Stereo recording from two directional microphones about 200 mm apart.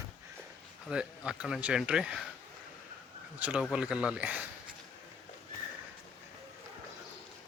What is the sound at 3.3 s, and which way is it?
Speech, 5° right (ahead or behind).